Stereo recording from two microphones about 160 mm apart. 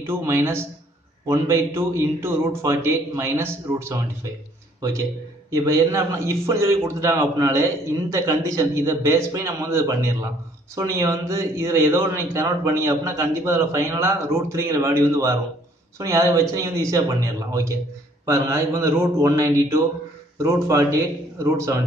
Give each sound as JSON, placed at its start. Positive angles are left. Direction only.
{"t": 0.0, "sound": "a man's voice", "side_deg": -15}
{"t": 5.5, "sound": "a man's voice", "side_deg": -20}